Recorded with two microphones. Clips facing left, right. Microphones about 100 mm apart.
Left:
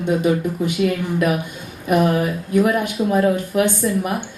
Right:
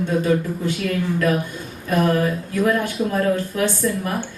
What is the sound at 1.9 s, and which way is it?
A woman's voice, 15° left (ahead or behind).